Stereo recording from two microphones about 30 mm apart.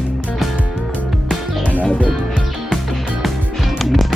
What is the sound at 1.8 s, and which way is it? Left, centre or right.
Speech, left.